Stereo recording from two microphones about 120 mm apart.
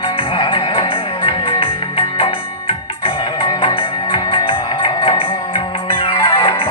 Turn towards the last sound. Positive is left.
turn(degrees=45)  # may be behind; listen again after turning